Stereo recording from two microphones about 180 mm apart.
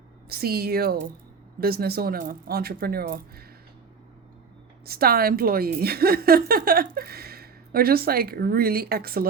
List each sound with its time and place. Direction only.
0.3 s a woman's voice: 60° right (ahead or behind)
4.9 s a woman's voice: 55° right (ahead or behind)